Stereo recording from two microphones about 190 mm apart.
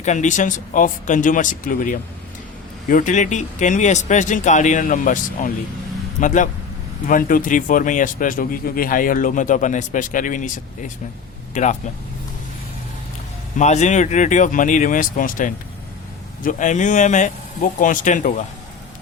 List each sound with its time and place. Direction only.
0.0 s a man's voice: 40° left (ahead or behind)
13.6 s speech: 40° left (ahead or behind)